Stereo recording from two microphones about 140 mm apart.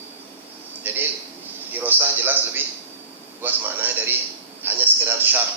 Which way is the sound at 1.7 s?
15° right (ahead or behind).